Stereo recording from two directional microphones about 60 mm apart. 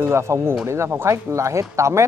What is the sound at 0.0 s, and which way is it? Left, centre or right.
Speech, right.